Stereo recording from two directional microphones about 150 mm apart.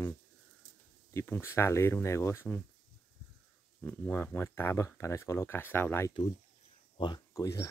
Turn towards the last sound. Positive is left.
turn(degrees=20)  # may be behind; listen again after turning